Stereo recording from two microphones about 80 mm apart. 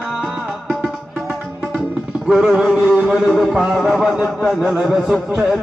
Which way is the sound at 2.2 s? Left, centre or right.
Centre.